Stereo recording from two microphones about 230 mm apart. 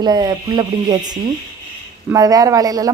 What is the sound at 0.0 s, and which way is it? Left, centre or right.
Speech, centre.